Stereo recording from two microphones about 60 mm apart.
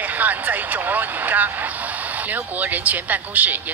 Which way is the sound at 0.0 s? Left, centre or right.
Right.